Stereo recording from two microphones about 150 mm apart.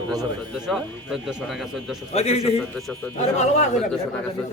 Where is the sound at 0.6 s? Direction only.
Centre (ahead or behind).